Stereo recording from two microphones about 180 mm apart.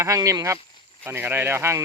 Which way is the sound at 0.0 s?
20° right (ahead or behind).